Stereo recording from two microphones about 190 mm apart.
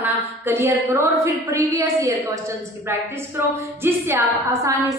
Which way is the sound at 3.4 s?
10° right (ahead or behind).